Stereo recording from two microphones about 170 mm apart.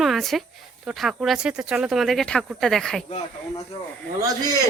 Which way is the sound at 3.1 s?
35° left (ahead or behind).